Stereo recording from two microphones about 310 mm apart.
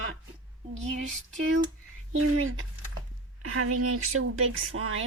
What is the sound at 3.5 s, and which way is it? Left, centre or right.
Speech, right.